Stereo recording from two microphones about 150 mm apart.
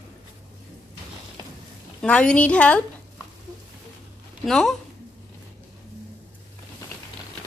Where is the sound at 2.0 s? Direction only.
5° left (ahead or behind).